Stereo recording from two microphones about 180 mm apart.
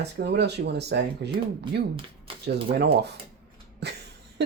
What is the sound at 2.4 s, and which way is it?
Speech, 65° right (ahead or behind).